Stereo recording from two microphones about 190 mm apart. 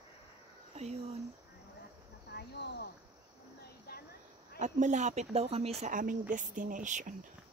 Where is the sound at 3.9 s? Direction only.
55° left (ahead or behind).